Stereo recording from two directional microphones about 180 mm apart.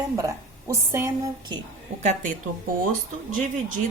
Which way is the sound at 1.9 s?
45° right (ahead or behind).